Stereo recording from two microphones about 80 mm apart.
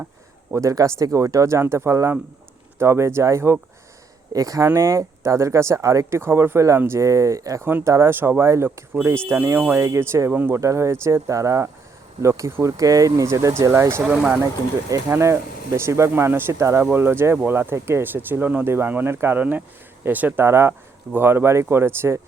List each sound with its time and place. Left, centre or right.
0.5 s speech: right
4.3 s speech: right
10.6 s speech: right
12.7 s speech: right
14.0 s speech: right
15.1 s speech: right